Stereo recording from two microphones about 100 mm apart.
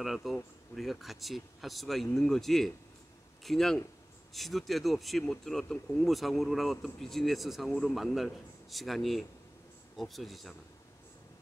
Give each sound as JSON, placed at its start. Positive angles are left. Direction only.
{"t": 0.0, "sound": "speech", "side_deg": 0}